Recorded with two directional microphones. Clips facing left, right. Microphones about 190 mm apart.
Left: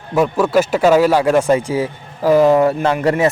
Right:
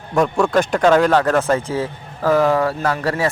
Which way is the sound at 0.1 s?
5° left (ahead or behind).